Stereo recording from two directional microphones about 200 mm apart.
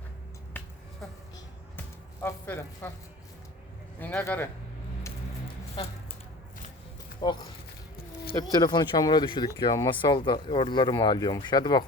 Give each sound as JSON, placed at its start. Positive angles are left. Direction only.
{"t": 2.2, "sound": "speech", "side_deg": 15}
{"t": 4.0, "sound": "speech", "side_deg": 10}
{"t": 5.7, "sound": "squish", "side_deg": 30}
{"t": 7.2, "sound": "speech", "side_deg": 20}
{"t": 8.4, "sound": "speech", "side_deg": 20}